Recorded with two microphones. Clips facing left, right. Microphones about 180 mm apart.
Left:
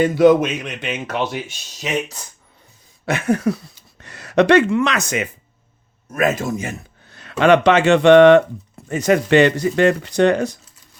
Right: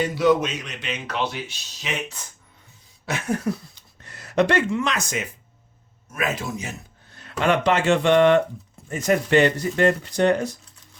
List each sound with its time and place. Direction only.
0.0 s speech: 50° left (ahead or behind)
3.1 s a sound: 65° left (ahead or behind)
4.0 s speech: 80° left
6.1 s speech: 45° left (ahead or behind)
7.1 s speech: 85° left